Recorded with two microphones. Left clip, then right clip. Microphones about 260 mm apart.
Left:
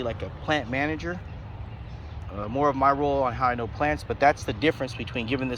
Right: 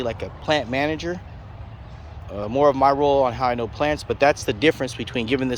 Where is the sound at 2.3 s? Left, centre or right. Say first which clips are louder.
Right 6 dB; right.